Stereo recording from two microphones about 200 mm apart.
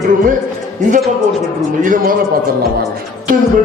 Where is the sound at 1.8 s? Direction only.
40° right (ahead or behind).